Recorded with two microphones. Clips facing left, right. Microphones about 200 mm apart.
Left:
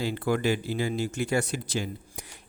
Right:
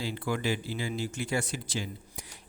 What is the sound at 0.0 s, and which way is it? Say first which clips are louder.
A man's voice: left 5 dB; 55° left (ahead or behind).